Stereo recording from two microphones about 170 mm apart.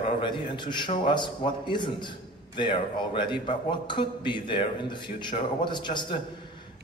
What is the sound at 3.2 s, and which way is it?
A man's voice, 30° left (ahead or behind).